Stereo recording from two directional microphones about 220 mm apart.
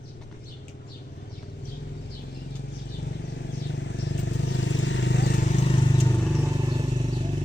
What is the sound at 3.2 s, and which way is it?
Vehicle, 50° left (ahead or behind).